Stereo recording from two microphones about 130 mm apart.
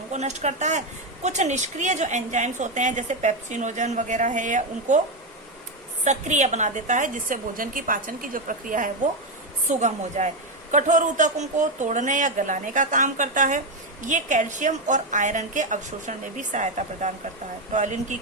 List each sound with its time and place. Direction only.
0.1 s a woman's voice: 60° right (ahead or behind)
6.1 s a woman's voice: 65° right (ahead or behind); by 8.9 s 90° right
9.6 s a woman's voice: 65° right (ahead or behind); by 13.6 s 90° right
14.0 s a woman's voice: 70° right (ahead or behind)